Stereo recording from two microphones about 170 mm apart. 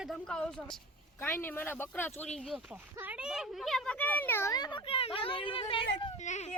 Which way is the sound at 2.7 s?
10° right (ahead or behind).